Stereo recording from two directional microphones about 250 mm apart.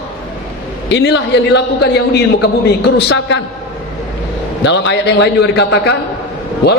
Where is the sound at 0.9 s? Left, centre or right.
Left.